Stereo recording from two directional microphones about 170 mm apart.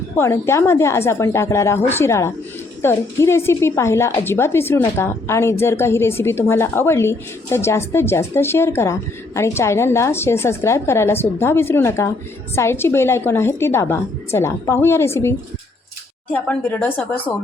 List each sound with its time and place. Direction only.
0.2 s a woman's voice: 15° left (ahead or behind)